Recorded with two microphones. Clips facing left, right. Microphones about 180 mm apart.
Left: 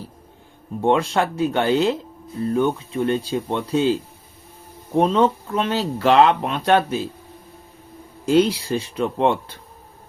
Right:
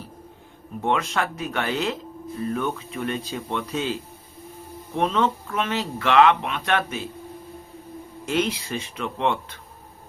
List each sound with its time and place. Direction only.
0.8 s speech: 30° left (ahead or behind)
4.9 s speech: 35° left (ahead or behind)
8.3 s speech: 35° left (ahead or behind)